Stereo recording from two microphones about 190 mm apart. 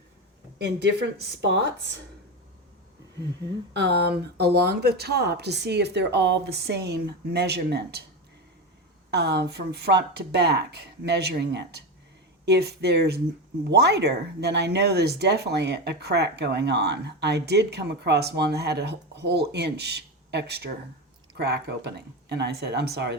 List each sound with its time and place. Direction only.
0.6 s a woman's voice: 65° right (ahead or behind)
3.8 s speech: 60° right (ahead or behind)
9.0 s speech: 60° right (ahead or behind)